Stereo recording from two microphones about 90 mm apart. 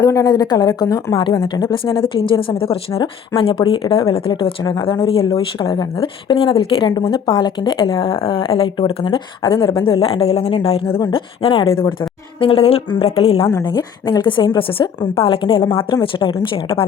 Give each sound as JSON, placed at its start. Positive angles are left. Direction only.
{"t": 0.0, "sound": "speech", "side_deg": 35}
{"t": 2.0, "sound": "speech", "side_deg": 75}
{"t": 7.0, "sound": "speech", "side_deg": 65}
{"t": 9.7, "sound": "a woman's voice", "side_deg": 85}
{"t": 12.4, "sound": "a woman's voice", "side_deg": 90}
{"t": 13.7, "sound": "speech", "side_deg": 55}